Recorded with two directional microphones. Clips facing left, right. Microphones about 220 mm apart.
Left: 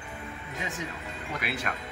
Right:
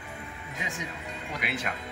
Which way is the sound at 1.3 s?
20° right (ahead or behind).